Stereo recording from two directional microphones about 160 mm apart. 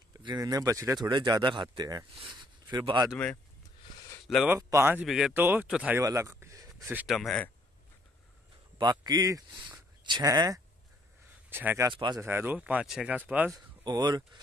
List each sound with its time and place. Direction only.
0.2 s speech: 25° right (ahead or behind)
4.5 s speech: 20° right (ahead or behind)
5.0 s speech: centre (ahead or behind)
6.0 s a sound: 20° right (ahead or behind)
6.9 s speech: 5° right (ahead or behind)
8.7 s speech: 25° right (ahead or behind)
11.9 s speech: 30° right (ahead or behind)
12.2 s speech: 15° right (ahead or behind)
13.8 s speech: 25° right (ahead or behind)